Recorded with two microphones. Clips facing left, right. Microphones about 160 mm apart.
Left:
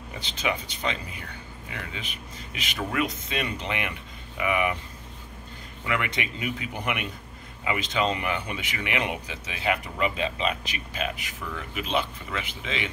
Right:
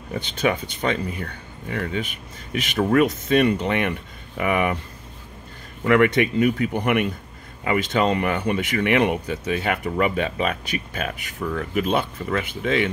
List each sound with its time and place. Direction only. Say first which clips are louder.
0.1 s speech: right 7 dB; 50° right (ahead or behind)
5.9 s speech: right 12 dB; 50° right (ahead or behind)